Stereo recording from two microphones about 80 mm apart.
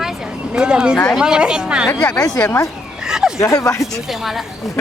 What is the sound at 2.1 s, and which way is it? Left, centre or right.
Speech, left.